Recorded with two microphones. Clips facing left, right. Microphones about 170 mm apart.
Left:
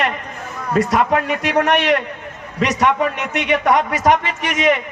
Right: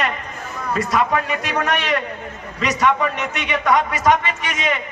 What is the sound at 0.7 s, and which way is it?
A man's voice, 60° left (ahead or behind).